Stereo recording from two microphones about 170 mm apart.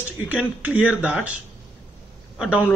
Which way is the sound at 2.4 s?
5° right (ahead or behind).